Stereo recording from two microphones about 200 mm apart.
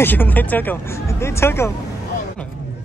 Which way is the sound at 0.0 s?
10° left (ahead or behind).